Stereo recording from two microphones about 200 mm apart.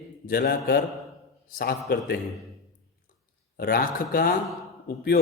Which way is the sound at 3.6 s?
50° left (ahead or behind).